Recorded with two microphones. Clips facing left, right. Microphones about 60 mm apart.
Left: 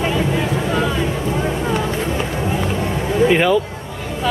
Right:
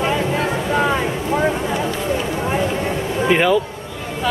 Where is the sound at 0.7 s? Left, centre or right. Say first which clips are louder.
Right 4 dB; right.